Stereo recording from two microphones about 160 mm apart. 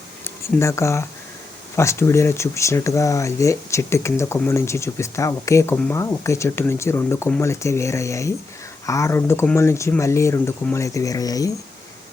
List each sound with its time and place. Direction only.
0.3 s speech: 15° left (ahead or behind)